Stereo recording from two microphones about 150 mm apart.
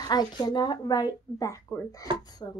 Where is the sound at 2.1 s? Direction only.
35° right (ahead or behind).